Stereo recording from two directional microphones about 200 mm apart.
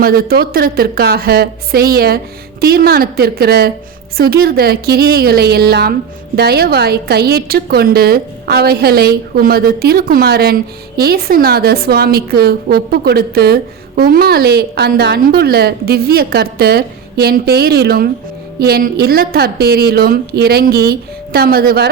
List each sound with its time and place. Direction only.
0.0 s a woman's voice: 50° right (ahead or behind)